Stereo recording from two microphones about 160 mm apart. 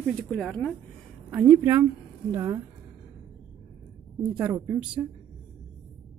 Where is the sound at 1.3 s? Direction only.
10° right (ahead or behind).